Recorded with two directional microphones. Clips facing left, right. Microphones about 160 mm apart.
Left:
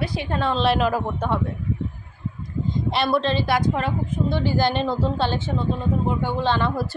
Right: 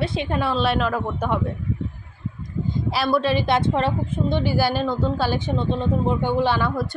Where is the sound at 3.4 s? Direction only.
25° right (ahead or behind).